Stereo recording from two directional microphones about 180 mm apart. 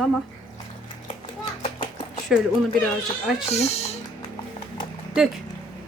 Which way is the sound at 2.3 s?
Centre (ahead or behind).